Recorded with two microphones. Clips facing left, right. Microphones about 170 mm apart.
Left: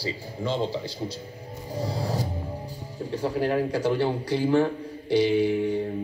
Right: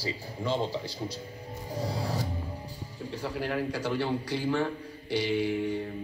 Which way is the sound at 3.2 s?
45° left (ahead or behind).